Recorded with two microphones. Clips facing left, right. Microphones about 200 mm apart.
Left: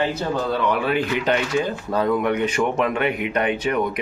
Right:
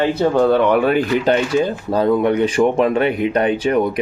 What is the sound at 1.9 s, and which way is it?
Speech, 30° right (ahead or behind).